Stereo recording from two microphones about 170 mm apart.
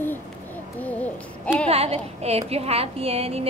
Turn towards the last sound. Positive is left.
turn(degrees=-35)  # may be behind; listen again after turning